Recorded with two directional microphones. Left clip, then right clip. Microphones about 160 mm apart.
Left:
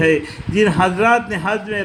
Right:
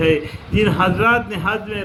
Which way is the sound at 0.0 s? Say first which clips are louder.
Left 1 dB; 35° left (ahead or behind).